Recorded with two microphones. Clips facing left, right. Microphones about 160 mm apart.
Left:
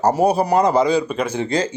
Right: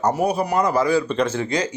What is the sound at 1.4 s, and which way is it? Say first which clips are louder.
Speech: left 3 dB; 30° left (ahead or behind).